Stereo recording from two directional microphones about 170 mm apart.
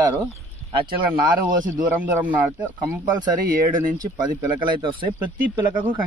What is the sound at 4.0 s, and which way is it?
Speech, 25° right (ahead or behind).